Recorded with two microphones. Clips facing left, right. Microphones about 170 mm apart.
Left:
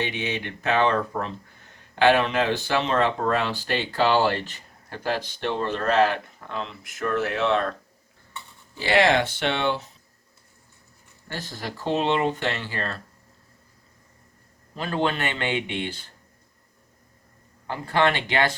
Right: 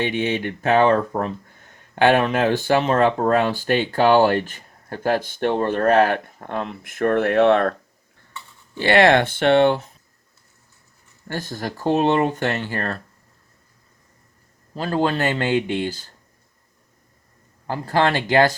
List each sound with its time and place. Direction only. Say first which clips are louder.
0.0 s speech: right 6 dB; 50° right (ahead or behind)
8.8 s speech: right 5 dB; 60° right (ahead or behind)
11.3 s speech: right 6 dB; 45° right (ahead or behind)
14.8 s speech: right 4 dB; 35° right (ahead or behind)
17.7 s speech: right 3 dB; 40° right (ahead or behind)